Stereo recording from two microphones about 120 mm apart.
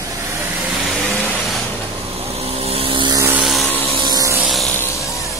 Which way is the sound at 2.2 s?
60° right (ahead or behind).